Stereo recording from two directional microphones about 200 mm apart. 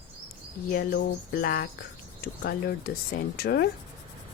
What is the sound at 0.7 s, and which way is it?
Cricket, 50° left (ahead or behind).